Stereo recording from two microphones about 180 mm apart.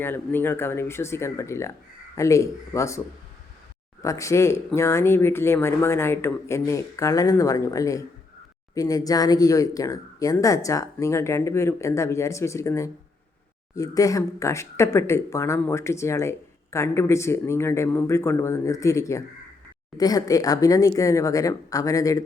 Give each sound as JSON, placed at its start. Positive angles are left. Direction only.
{"t": 0.0, "sound": "speech", "side_deg": 10}
{"t": 4.0, "sound": "a woman's voice", "side_deg": 15}